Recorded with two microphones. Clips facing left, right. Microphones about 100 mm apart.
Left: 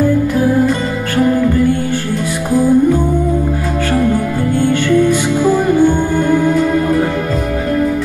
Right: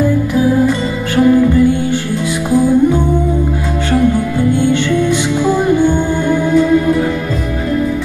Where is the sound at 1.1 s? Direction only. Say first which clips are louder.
Right 3 dB; 45° left (ahead or behind).